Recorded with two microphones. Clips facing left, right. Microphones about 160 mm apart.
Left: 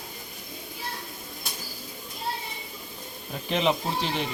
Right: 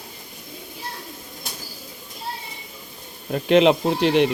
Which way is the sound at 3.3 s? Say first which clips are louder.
Right 10 dB; 75° right (ahead or behind).